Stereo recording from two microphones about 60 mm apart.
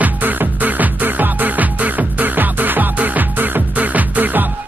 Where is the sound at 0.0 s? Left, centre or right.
Right.